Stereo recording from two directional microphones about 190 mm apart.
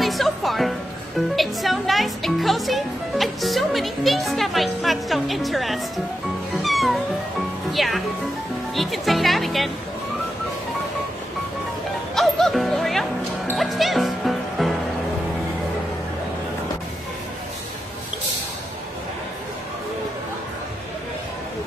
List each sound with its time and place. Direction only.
0.0 s music: centre (ahead or behind)
1.3 s speech: centre (ahead or behind)
6.6 s cat: centre (ahead or behind)
7.7 s speech: centre (ahead or behind)
12.2 s music: centre (ahead or behind)